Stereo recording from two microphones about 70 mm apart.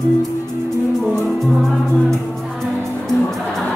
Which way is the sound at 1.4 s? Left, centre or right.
Centre.